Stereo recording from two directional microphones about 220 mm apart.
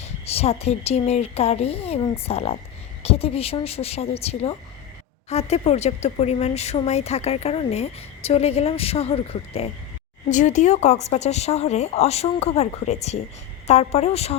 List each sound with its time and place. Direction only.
0.0 s speech: 25° left (ahead or behind)